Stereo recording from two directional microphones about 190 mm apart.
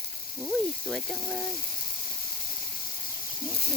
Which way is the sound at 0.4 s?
Centre (ahead or behind).